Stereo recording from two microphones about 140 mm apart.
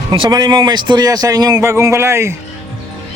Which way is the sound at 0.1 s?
30° right (ahead or behind).